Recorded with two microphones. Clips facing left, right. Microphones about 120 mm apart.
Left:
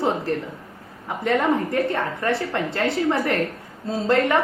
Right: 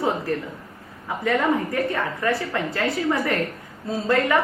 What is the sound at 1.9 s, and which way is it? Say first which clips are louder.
A woman's voice: even; 25° left (ahead or behind).